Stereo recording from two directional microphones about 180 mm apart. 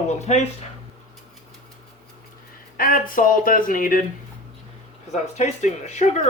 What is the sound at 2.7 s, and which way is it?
Speech, 50° left (ahead or behind).